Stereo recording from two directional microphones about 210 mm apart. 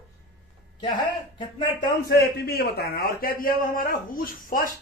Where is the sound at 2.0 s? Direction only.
50° left (ahead or behind).